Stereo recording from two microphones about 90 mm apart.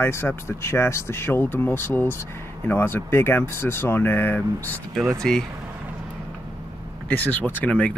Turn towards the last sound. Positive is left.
turn(degrees=15)  # may be behind; listen again after turning